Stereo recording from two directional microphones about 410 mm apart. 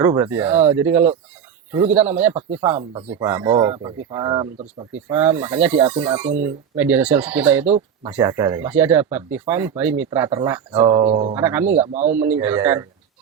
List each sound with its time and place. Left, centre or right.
0.0 s speech: centre
11.8 s speech: centre
12.1 s speech: centre